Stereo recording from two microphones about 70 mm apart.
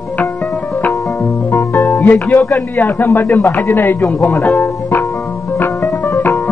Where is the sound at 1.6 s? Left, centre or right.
Left.